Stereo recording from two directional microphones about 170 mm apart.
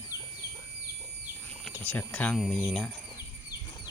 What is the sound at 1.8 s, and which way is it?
Speech, 10° left (ahead or behind).